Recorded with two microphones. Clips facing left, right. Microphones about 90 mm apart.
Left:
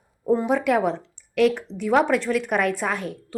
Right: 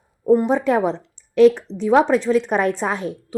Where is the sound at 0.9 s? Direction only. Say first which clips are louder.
Right 6 dB; 20° right (ahead or behind).